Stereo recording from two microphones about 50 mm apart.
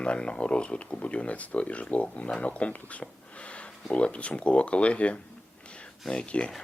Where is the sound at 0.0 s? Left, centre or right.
Left.